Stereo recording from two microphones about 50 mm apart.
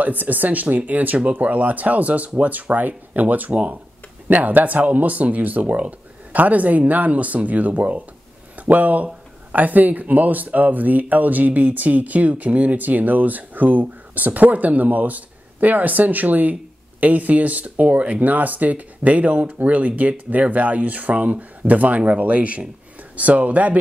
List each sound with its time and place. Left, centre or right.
0.0 s speech: right